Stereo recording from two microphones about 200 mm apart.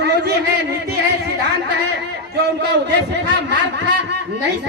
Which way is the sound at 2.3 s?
55° right (ahead or behind).